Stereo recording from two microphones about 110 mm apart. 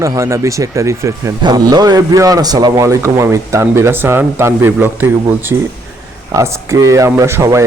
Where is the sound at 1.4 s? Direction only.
40° right (ahead or behind).